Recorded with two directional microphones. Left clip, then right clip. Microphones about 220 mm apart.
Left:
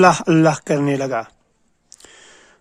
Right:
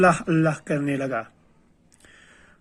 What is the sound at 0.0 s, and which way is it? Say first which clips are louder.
Speech: left 6 dB; 40° left (ahead or behind).